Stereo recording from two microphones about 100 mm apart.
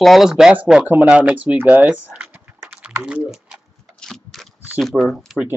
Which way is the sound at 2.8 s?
10° right (ahead or behind).